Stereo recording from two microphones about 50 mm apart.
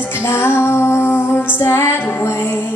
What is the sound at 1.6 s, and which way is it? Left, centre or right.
Music, left.